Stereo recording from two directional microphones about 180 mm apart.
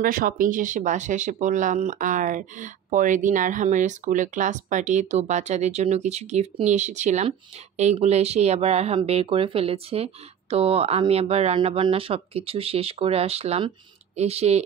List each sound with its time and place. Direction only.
0.0 s speech: 50° right (ahead or behind); by 14.6 s 35° right (ahead or behind)